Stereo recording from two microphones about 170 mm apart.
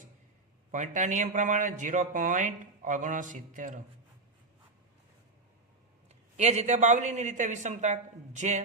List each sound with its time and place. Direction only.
0.7 s speech: 45° right (ahead or behind)
6.3 s speech: 40° right (ahead or behind)